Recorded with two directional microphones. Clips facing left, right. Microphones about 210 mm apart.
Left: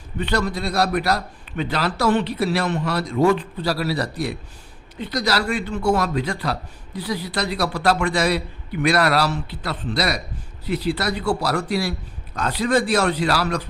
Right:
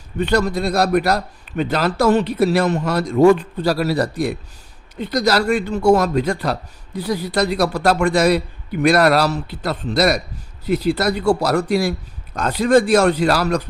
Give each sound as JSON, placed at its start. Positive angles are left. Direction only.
{"t": 0.2, "sound": "speech", "side_deg": -45}